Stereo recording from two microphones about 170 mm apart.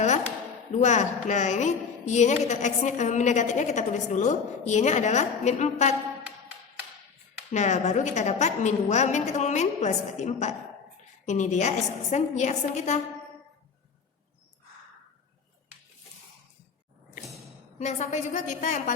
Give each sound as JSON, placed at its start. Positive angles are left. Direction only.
{"t": 0.8, "sound": "a woman's voice", "side_deg": 45}
{"t": 7.5, "sound": "a woman's voice", "side_deg": 45}
{"t": 17.7, "sound": "a woman's voice", "side_deg": 40}